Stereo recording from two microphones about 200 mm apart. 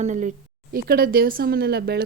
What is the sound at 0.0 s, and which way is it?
A woman's voice, 40° right (ahead or behind).